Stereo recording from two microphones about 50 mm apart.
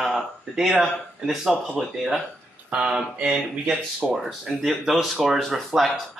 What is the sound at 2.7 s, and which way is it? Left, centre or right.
Speech, centre.